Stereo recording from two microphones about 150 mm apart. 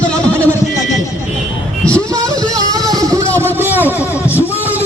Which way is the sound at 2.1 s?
25° right (ahead or behind).